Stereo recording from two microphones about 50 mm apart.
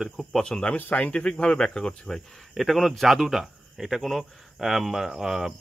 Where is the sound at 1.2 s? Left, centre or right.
Left.